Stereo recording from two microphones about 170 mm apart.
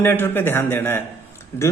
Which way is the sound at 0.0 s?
15° left (ahead or behind).